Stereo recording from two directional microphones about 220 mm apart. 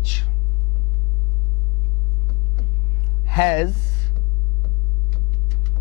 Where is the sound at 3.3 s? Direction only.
10° left (ahead or behind).